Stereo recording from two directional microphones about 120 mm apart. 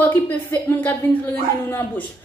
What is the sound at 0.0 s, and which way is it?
A woman's voice, 15° left (ahead or behind).